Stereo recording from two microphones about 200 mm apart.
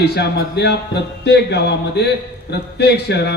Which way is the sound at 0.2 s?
55° left (ahead or behind).